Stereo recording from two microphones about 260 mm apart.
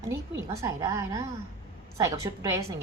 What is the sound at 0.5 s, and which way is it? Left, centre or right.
A woman's voice, centre.